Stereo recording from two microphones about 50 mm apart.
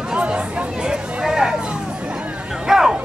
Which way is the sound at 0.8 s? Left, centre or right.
Centre.